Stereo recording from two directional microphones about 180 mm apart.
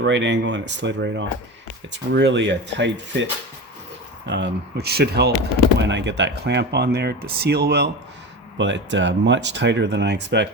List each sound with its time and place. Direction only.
0.0 s speech: 80° right
4.3 s speech: 75° right (ahead or behind); by 5.3 s 60° right (ahead or behind)
5.9 s speech: 75° right (ahead or behind)
8.5 s speech: 90° right; by 10.5 s 75° right (ahead or behind)